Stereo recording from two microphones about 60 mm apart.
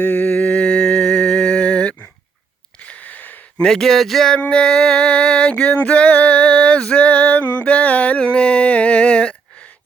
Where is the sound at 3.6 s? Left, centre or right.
Centre.